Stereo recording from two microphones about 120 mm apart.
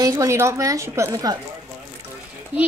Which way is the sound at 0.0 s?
25° right (ahead or behind).